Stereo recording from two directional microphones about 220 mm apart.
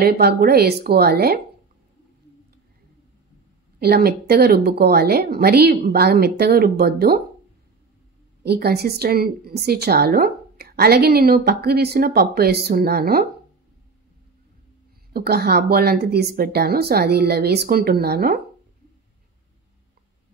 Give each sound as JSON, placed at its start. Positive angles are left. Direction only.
{"t": 0.0, "sound": "a woman's voice", "side_deg": -45}
{"t": 3.8, "sound": "a woman's voice", "side_deg": -45}
{"t": 8.5, "sound": "a woman's voice", "side_deg": -45}
{"t": 15.1, "sound": "a woman's voice", "side_deg": -45}